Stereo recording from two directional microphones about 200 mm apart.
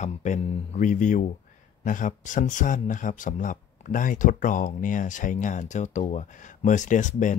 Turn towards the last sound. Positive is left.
turn(degrees=40)  # may be behind; listen again after turning